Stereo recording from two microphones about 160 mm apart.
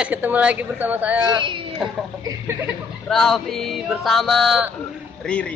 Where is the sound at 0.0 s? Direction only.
10° right (ahead or behind).